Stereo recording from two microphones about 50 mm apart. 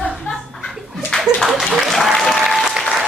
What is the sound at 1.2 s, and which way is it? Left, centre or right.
Applause, centre.